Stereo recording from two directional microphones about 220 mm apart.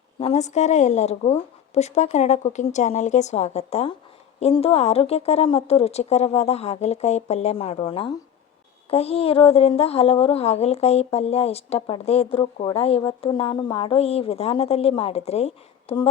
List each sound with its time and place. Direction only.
0.2 s a woman's voice: 30° left (ahead or behind)